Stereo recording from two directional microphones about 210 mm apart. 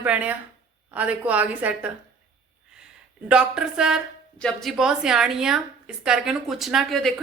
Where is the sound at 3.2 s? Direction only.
5° right (ahead or behind).